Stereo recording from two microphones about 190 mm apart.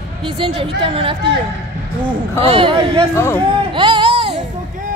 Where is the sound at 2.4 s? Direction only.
30° right (ahead or behind).